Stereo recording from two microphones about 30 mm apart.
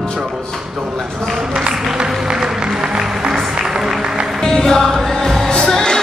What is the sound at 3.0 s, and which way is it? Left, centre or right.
Music, right.